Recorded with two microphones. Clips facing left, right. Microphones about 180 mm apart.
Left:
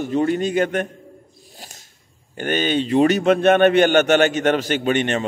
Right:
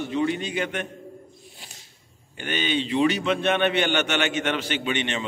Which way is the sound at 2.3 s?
45° left (ahead or behind).